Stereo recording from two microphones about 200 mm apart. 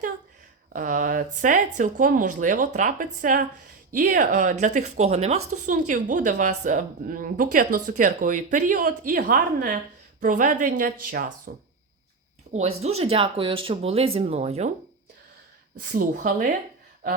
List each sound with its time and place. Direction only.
0.7 s speech: 40° right (ahead or behind)
12.5 s speech: 30° right (ahead or behind)
15.8 s speech: 45° right (ahead or behind)